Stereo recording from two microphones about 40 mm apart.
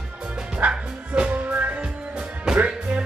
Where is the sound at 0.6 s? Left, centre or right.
Right.